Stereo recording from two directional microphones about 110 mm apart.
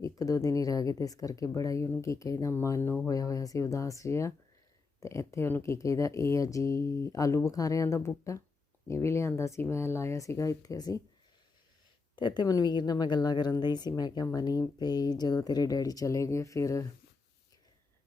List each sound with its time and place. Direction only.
0.0 s speech: 30° left (ahead or behind)
12.1 s speech: 45° left (ahead or behind)